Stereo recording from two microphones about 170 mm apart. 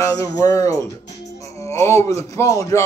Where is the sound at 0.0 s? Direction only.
20° left (ahead or behind).